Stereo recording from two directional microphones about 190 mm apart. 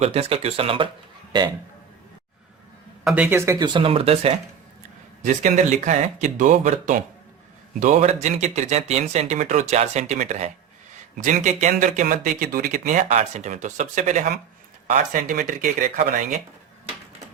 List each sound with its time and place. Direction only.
0.0 s speech: 30° right (ahead or behind)
3.0 s speech: 5° right (ahead or behind); by 16.4 s 45° right (ahead or behind)